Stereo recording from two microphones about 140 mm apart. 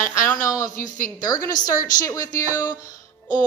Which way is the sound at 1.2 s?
25° left (ahead or behind).